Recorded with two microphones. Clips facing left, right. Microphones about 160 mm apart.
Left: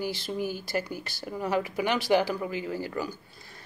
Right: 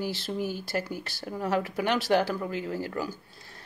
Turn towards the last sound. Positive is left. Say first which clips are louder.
# even
turn(degrees=0)  # may be behind; listen again after turning